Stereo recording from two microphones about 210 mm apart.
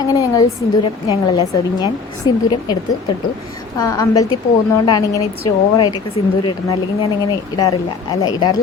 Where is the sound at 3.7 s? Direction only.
15° left (ahead or behind).